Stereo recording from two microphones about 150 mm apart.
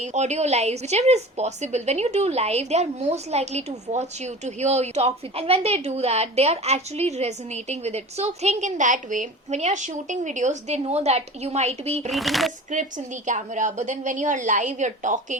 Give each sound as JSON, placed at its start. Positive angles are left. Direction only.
{"t": 0.0, "sound": "a woman's voice", "side_deg": -50}
{"t": 12.1, "sound": "speech", "side_deg": 0}
{"t": 13.2, "sound": "a woman's voice", "side_deg": -55}